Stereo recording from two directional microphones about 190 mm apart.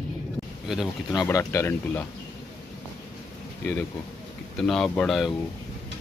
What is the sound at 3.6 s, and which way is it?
Speech, 10° left (ahead or behind).